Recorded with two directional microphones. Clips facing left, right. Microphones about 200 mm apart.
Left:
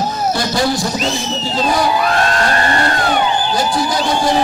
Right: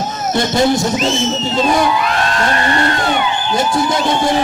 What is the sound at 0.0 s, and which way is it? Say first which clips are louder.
Music: even; 20° right (ahead or behind).